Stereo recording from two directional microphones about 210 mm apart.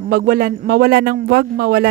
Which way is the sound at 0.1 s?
45° right (ahead or behind).